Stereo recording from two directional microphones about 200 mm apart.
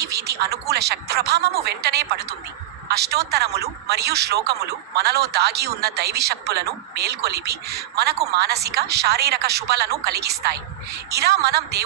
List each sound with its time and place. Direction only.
0.0 s a man's voice: 55° right (ahead or behind)